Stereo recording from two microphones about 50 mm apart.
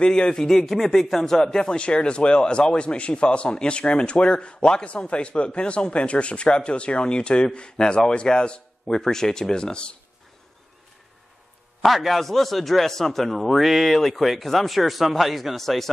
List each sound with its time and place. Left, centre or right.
0.0 s speech: centre
11.8 s a man's voice: centre